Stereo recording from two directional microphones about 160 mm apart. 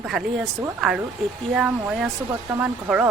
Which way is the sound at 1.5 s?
5° right (ahead or behind).